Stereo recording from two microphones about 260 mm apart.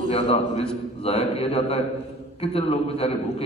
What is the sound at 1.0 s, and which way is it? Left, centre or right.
A man's voice, left.